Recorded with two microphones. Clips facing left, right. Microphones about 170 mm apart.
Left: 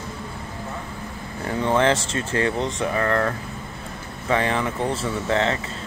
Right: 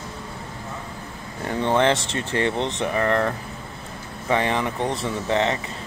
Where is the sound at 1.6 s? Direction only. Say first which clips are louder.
Even; 20° right (ahead or behind).